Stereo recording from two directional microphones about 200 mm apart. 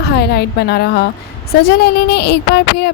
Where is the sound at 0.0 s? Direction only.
55° left (ahead or behind).